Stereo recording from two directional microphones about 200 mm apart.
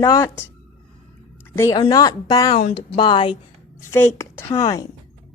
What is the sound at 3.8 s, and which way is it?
A woman's voice, 15° left (ahead or behind).